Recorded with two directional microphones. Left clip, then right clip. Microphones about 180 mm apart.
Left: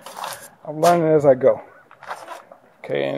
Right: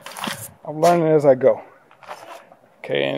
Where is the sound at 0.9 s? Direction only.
25° right (ahead or behind).